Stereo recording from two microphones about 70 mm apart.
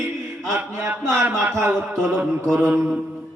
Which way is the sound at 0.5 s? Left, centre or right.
Right.